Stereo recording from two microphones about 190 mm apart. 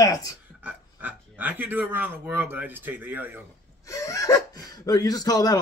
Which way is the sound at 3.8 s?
15° left (ahead or behind).